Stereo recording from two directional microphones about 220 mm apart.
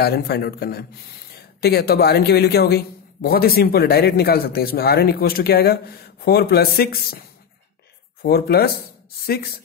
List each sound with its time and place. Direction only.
0.0 s a woman's voice: 45° left (ahead or behind)